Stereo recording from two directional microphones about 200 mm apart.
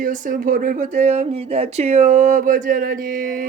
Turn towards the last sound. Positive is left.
turn(degrees=-45)  # may be behind; listen again after turning